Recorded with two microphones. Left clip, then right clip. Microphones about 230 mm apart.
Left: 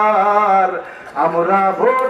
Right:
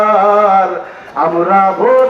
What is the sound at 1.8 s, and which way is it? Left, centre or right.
Mantra, left.